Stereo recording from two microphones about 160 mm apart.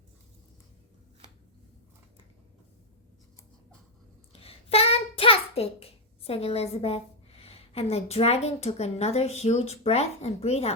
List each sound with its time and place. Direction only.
4.3 s a child's voice: 35° left (ahead or behind)